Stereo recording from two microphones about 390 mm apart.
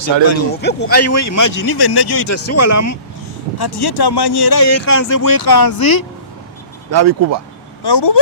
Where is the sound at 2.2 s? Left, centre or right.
Left.